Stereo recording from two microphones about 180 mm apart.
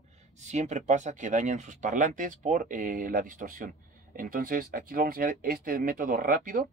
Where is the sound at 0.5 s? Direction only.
40° right (ahead or behind).